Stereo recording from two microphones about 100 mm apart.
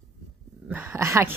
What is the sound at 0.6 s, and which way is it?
Speech, 20° right (ahead or behind).